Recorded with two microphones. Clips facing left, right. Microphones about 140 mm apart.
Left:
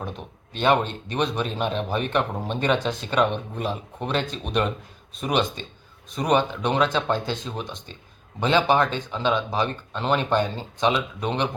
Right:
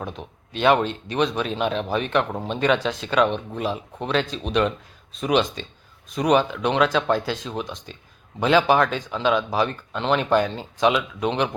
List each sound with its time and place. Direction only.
0.0 s speech: centre (ahead or behind)